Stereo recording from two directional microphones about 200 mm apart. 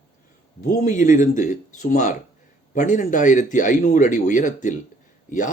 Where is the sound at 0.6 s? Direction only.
40° left (ahead or behind).